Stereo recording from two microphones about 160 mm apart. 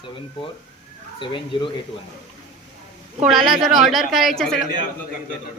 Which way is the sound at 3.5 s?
Centre (ahead or behind).